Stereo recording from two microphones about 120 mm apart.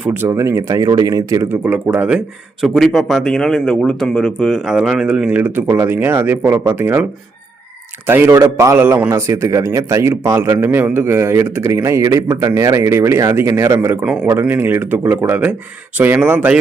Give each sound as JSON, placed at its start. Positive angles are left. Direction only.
{"t": 0.0, "sound": "a man's voice", "side_deg": -15}
{"t": 1.5, "sound": "a man's voice", "side_deg": -15}